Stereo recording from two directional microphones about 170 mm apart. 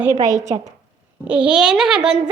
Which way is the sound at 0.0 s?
15° right (ahead or behind).